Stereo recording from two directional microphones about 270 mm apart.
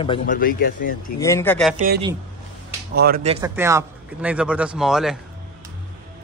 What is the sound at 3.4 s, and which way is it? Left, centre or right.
A man's voice, centre.